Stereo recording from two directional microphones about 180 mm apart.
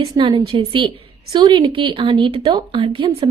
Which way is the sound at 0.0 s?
25° right (ahead or behind).